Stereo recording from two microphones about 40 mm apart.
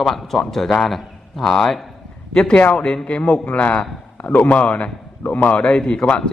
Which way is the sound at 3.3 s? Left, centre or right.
Left.